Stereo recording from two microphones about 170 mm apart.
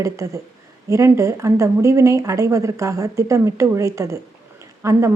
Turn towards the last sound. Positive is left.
turn(degrees=-15)  # may be behind; listen again after turning